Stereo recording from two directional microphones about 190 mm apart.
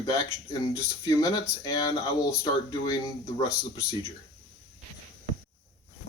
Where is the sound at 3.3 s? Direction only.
15° left (ahead or behind).